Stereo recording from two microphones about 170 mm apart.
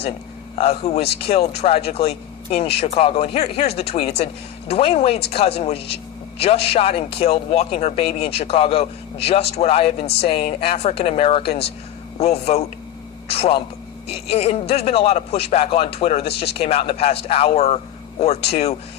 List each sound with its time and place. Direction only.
0.5 s a man's voice: 35° left (ahead or behind)